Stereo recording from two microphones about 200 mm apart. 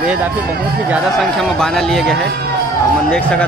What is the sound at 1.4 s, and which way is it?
Speech, centre (ahead or behind).